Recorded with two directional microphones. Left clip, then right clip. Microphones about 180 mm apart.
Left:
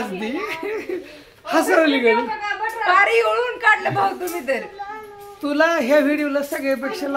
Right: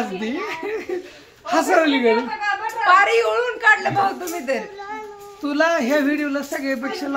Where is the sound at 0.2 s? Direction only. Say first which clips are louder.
Even; 20° left (ahead or behind).